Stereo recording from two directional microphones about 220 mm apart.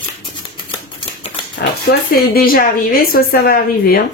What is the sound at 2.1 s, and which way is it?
A woman's voice, 40° left (ahead or behind).